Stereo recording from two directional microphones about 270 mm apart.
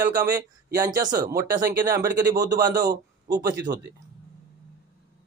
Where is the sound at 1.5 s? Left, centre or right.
Centre.